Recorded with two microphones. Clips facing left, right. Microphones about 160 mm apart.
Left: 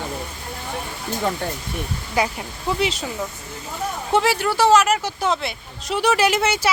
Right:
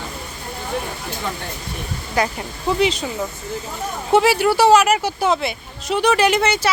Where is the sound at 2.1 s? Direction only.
5° left (ahead or behind).